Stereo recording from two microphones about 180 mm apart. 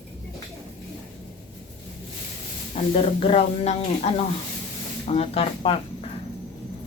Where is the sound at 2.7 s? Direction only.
35° left (ahead or behind).